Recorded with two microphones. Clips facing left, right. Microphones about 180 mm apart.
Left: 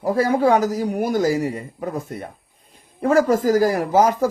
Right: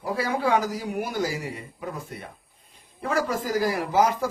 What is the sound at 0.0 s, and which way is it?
A man's voice, 45° left (ahead or behind).